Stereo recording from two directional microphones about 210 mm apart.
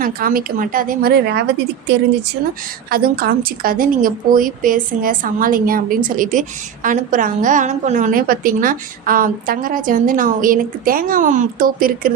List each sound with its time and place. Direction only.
0.0 s a woman's voice: 45° right (ahead or behind)
2.9 s a woman's voice: 45° right (ahead or behind)